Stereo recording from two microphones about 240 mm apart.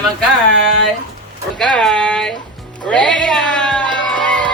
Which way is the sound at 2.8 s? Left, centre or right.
Centre.